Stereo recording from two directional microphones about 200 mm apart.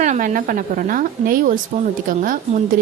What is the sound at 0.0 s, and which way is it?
Speech, 40° right (ahead or behind).